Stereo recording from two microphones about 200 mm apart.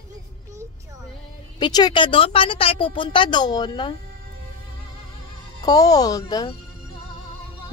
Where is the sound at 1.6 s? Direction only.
20° left (ahead or behind).